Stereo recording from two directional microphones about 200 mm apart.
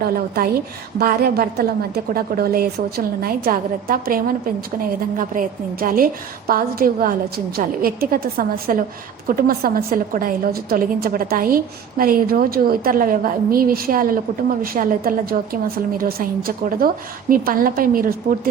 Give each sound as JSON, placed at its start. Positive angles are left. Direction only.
{"t": 0.0, "sound": "a woman's voice", "side_deg": -50}